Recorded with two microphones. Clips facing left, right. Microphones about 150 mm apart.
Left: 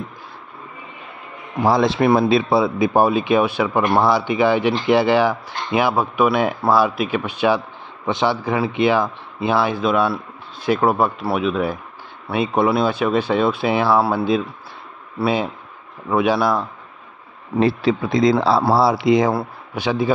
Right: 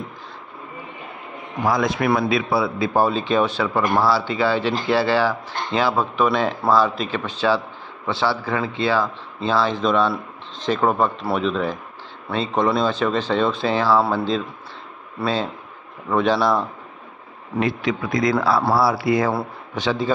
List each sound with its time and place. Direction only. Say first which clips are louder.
1.6 s speech: left 4 dB; 30° left (ahead or behind); by 16.6 s 5° left (ahead or behind)
17.6 s speech: left 5 dB; 30° left (ahead or behind); by 20.1 s 10° left (ahead or behind)